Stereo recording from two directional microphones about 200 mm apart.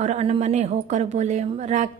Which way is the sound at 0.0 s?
35° right (ahead or behind).